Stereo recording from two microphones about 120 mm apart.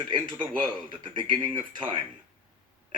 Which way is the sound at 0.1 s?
45° right (ahead or behind).